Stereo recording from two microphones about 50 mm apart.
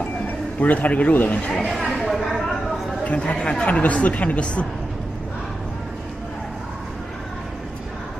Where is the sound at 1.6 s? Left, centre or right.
Centre.